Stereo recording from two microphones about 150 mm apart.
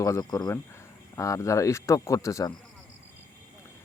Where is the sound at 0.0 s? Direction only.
20° left (ahead or behind).